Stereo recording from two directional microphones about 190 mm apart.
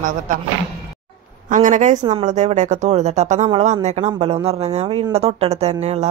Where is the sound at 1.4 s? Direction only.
40° right (ahead or behind).